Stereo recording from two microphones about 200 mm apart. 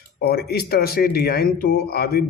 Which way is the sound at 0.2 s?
50° left (ahead or behind).